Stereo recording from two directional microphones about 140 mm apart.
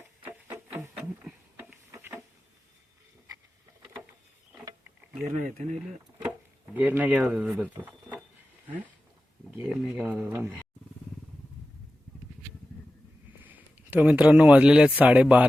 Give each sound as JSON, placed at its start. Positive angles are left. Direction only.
{"t": 0.0, "sound": "music", "side_deg": -15}
{"t": 0.7, "sound": "a sound", "side_deg": -10}
{"t": 5.4, "sound": "speech", "side_deg": -65}
{"t": 6.7, "sound": "speech", "side_deg": -15}
{"t": 9.6, "sound": "speech", "side_deg": -10}
{"t": 13.4, "sound": "speech", "side_deg": -10}